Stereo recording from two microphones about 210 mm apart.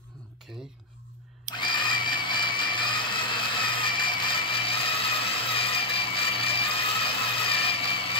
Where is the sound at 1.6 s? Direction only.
20° left (ahead or behind).